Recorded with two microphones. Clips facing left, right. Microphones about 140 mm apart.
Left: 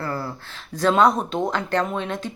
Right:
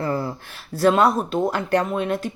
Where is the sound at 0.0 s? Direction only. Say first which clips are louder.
Right 4 dB; 20° right (ahead or behind).